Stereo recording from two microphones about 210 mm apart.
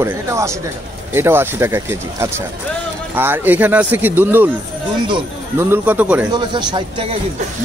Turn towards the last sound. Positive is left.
turn(degrees=-25)  # may be behind; listen again after turning